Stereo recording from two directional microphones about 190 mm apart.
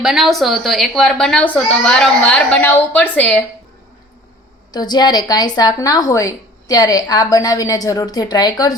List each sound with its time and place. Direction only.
0.0 s speech: centre (ahead or behind)
4.7 s a woman's voice: 20° left (ahead or behind)